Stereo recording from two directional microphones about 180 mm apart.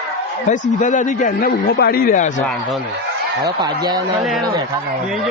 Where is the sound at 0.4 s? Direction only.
45° left (ahead or behind).